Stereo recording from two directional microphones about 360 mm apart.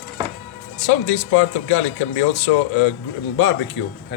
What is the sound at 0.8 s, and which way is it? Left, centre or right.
Speech, left.